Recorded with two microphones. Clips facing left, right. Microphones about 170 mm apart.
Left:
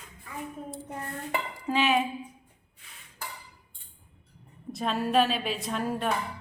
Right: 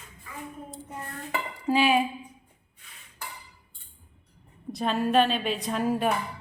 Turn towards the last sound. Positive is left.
turn(degrees=0)  # may be behind; listen again after turning